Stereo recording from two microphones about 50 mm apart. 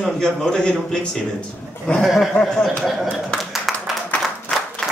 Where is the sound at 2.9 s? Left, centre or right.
Centre.